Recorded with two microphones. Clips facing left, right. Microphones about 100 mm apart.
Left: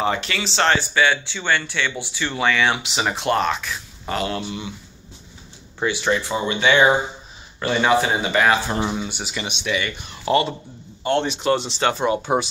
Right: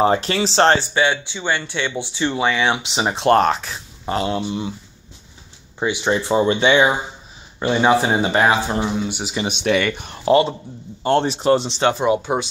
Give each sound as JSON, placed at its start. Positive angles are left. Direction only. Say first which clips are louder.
{"t": 0.0, "sound": "speech", "louder": "right 6 dB", "side_deg": -35}
{"t": 3.3, "sound": "speech", "louder": "right 8 dB", "side_deg": -45}
{"t": 5.8, "sound": "speech", "louder": "right 1 dB", "side_deg": -15}
{"t": 7.6, "sound": "speech", "louder": "right 3 dB", "side_deg": -20}
{"t": 7.9, "sound": "speech", "louder": "right 2 dB", "side_deg": -35}
{"t": 8.8, "sound": "speech", "louder": "right 3 dB", "side_deg": 0}
{"t": 9.1, "sound": "speech", "louder": "right 4 dB", "side_deg": -20}
{"t": 9.5, "sound": "speech", "louder": "right 7 dB", "side_deg": -50}
{"t": 10.2, "sound": "speech", "louder": "right 4 dB", "side_deg": -30}
{"t": 11.9, "sound": "speech", "louder": "right 3 dB", "side_deg": -15}
{"t": 12.2, "sound": "speech", "louder": "left 1 dB", "side_deg": 0}